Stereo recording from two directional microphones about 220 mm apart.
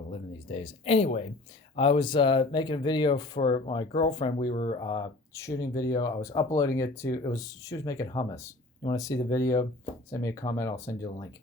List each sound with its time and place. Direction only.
0.1 s speech: 25° left (ahead or behind)